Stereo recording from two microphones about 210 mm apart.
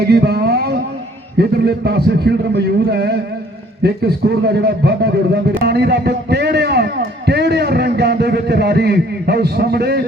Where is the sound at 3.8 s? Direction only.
50° right (ahead or behind).